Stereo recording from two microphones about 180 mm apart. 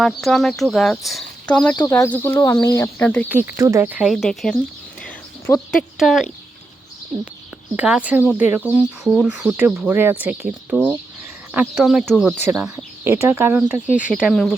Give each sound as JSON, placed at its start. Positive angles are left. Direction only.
{"t": 0.0, "sound": "speech", "side_deg": 5}
{"t": 3.2, "sound": "speech", "side_deg": -10}
{"t": 5.5, "sound": "speech", "side_deg": 15}
{"t": 6.0, "sound": "speech", "side_deg": 0}
{"t": 7.8, "sound": "speech", "side_deg": -5}